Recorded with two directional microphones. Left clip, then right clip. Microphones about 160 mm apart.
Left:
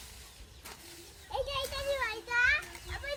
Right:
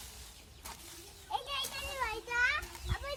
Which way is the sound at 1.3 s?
25° right (ahead or behind).